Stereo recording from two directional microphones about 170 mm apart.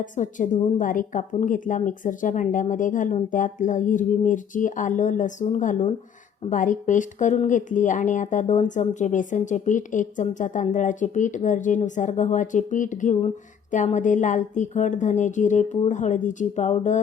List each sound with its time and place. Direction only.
0.0 s speech: 50° left (ahead or behind)